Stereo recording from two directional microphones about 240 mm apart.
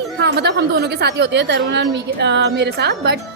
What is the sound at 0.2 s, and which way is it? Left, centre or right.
A woman's voice, right.